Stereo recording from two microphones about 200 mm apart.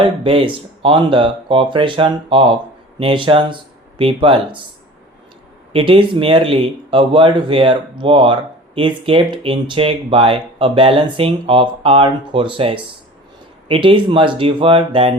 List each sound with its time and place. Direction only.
0.0 s speech: 25° right (ahead or behind)
5.7 s speech: 25° right (ahead or behind)